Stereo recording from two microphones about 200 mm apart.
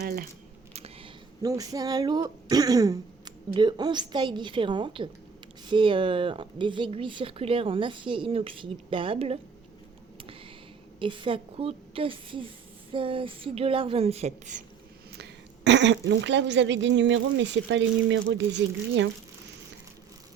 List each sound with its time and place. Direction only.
0.0 s speech: 50° right (ahead or behind)
0.7 s a sound: 30° right (ahead or behind)
1.4 s speech: 15° right (ahead or behind)
11.0 s speech: 25° right (ahead or behind)
15.1 s speech: 60° right (ahead or behind)